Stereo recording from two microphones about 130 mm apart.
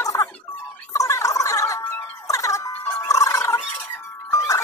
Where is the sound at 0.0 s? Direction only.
25° left (ahead or behind).